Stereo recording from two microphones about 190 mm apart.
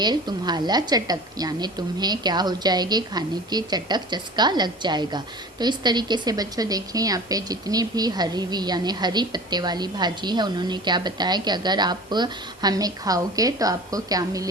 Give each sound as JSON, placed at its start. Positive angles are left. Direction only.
{"t": 0.0, "sound": "a woman's voice", "side_deg": -20}